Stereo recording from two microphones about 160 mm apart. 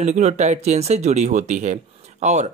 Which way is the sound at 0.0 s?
45° right (ahead or behind).